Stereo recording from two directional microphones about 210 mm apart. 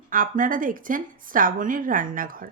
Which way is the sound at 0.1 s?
40° right (ahead or behind).